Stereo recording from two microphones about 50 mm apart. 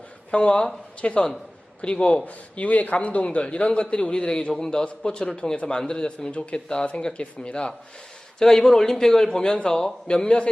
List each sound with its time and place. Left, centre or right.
0.3 s a man's voice: left
2.2 s a man's voice: left